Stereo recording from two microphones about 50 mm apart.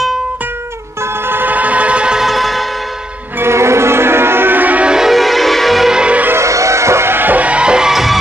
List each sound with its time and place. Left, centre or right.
1.3 s music: right
2.1 s music: centre
3.3 s music: right
4.8 s a sound: centre
5.1 s music: centre
5.9 s music: centre
6.3 s music: right
7.2 s music: right
7.4 s music: right
7.9 s music: centre